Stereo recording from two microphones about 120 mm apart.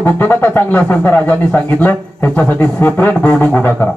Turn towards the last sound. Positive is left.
turn(degrees=15)  # may be behind; listen again after turning